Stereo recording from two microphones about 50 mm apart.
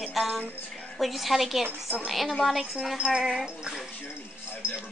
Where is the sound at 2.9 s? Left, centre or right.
Centre.